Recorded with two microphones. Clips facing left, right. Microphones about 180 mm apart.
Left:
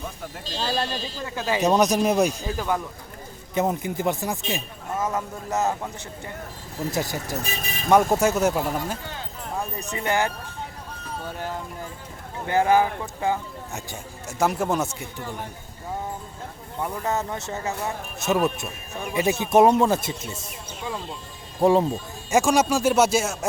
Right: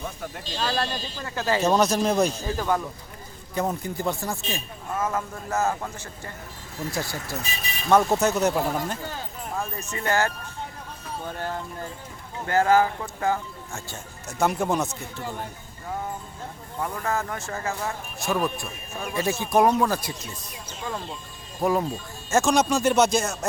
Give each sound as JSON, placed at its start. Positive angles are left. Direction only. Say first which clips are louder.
{"t": 0.5, "sound": "speech", "louder": "even", "side_deg": 25}
{"t": 1.4, "sound": "speech", "louder": "left 1 dB", "side_deg": 15}
{"t": 6.9, "sound": "speech", "louder": "left 4 dB", "side_deg": 15}
{"t": 7.4, "sound": "speech", "louder": "left 3 dB", "side_deg": 50}
{"t": 8.1, "sound": "speech", "louder": "left 1 dB", "side_deg": 10}
{"t": 16.8, "sound": "speech", "louder": "left 1 dB", "side_deg": 20}
{"t": 21.6, "sound": "speech", "louder": "left 5 dB", "side_deg": 30}
{"t": 21.9, "sound": "speech", "louder": "left 2 dB", "side_deg": 10}